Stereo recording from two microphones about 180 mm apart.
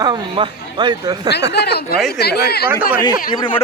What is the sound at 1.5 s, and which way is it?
Speech, 65° left (ahead or behind).